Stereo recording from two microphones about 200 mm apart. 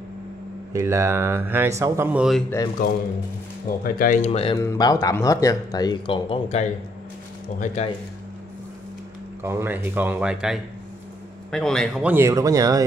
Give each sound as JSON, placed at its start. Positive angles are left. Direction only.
{"t": 0.7, "sound": "speech", "side_deg": -15}
{"t": 2.8, "sound": "speech", "side_deg": 45}
{"t": 4.3, "sound": "speech", "side_deg": 30}
{"t": 4.6, "sound": "speech", "side_deg": 20}
{"t": 9.4, "sound": "speech", "side_deg": -10}